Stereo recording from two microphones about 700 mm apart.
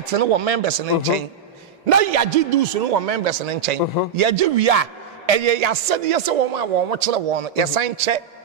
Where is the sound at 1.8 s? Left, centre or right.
Right.